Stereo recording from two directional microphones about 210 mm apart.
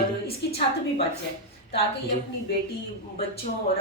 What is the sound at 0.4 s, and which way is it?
Speech, 55° left (ahead or behind).